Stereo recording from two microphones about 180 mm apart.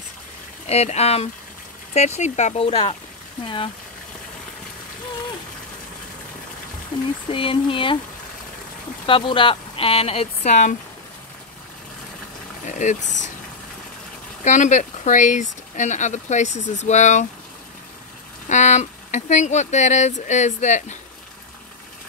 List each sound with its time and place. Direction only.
0.7 s speech: 35° left (ahead or behind)
7.2 s speech: 30° left (ahead or behind)
9.0 s speech: 30° left (ahead or behind)
12.6 s speech: 45° left (ahead or behind)
14.4 s speech: 40° left (ahead or behind)
18.5 s speech: 40° left (ahead or behind)